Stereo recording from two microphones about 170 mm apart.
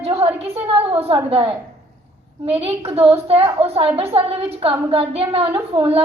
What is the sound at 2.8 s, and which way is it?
A woman's voice, 35° right (ahead or behind).